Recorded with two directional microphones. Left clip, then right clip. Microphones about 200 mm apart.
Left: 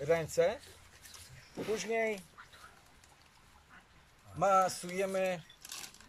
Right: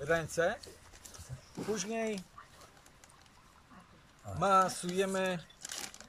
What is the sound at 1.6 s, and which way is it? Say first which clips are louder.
Speech: left 3 dB; centre (ahead or behind).